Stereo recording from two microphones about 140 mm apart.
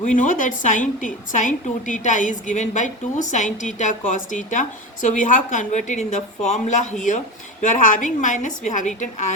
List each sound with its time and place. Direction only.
0.0 s a woman's voice: 65° left (ahead or behind)